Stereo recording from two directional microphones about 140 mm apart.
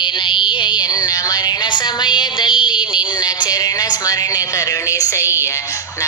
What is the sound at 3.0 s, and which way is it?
Speech, 30° left (ahead or behind).